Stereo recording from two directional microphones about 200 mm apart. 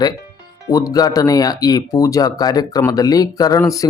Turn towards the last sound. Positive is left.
turn(degrees=15)  # may be behind; listen again after turning